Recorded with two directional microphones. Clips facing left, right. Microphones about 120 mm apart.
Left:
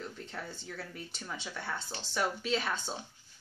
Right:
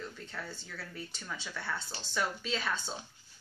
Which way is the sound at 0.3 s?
20° left (ahead or behind).